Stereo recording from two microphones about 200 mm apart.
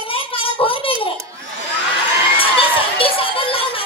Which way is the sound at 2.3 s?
25° left (ahead or behind).